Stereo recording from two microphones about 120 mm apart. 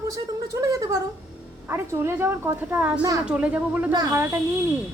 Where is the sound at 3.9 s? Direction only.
25° right (ahead or behind).